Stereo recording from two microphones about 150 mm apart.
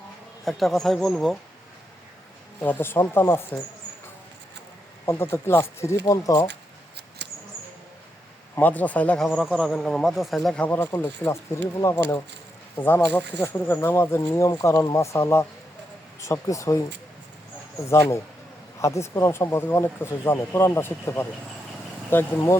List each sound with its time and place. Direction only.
0.4 s speech: centre (ahead or behind)
2.6 s speech: 10° left (ahead or behind)
5.0 s speech: 15° left (ahead or behind)
8.5 s speech: 10° left (ahead or behind)
12.7 s speech: 15° left (ahead or behind)
17.8 s speech: 20° left (ahead or behind)